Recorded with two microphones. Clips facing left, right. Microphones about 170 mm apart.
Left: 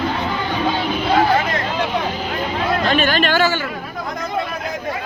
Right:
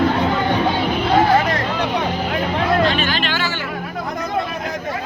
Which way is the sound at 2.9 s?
50° left (ahead or behind).